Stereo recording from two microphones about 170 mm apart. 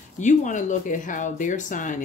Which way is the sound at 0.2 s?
45° left (ahead or behind).